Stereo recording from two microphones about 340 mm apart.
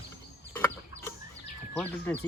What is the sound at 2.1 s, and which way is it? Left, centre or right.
Speech, centre.